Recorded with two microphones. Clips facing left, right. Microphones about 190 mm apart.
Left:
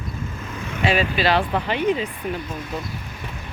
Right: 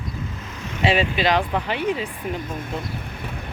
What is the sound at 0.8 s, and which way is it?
Speech, 25° right (ahead or behind).